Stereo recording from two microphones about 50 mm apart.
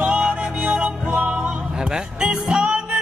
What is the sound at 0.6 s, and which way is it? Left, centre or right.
Music, right.